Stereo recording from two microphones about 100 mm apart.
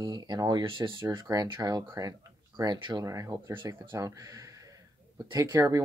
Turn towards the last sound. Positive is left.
turn(degrees=-30)  # may be behind; listen again after turning